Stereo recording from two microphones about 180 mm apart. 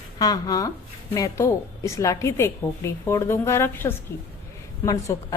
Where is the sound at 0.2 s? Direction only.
20° left (ahead or behind).